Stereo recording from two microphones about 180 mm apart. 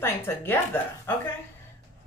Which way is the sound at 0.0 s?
15° left (ahead or behind).